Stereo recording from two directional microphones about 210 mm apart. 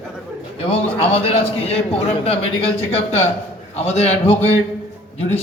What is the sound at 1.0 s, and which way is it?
Speech, 30° left (ahead or behind).